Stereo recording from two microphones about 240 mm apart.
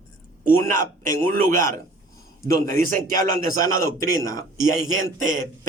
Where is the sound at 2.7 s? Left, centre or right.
Right.